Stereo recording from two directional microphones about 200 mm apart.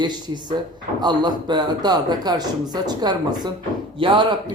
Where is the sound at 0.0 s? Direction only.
20° right (ahead or behind).